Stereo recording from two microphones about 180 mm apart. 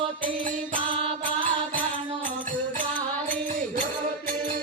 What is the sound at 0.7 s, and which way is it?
Mantra, 30° right (ahead or behind).